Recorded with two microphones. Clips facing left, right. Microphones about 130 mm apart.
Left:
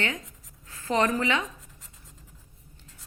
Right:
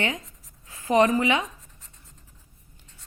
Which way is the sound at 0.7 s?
15° right (ahead or behind).